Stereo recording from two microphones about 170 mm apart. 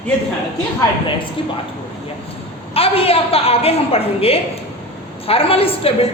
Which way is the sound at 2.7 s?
35° left (ahead or behind).